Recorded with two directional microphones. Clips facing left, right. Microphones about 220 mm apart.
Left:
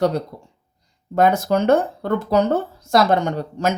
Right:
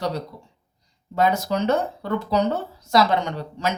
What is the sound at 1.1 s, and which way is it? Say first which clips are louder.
Speech: left 5 dB; 55° left (ahead or behind).